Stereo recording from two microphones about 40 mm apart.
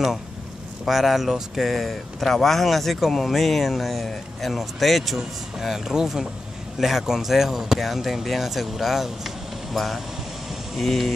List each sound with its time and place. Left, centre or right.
0.8 s speech: centre